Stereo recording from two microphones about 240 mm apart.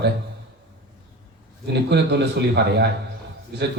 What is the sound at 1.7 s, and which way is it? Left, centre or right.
A man's voice, right.